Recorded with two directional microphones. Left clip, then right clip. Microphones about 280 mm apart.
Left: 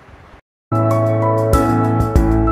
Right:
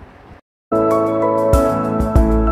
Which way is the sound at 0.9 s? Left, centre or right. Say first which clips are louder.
Left 1 dB; centre.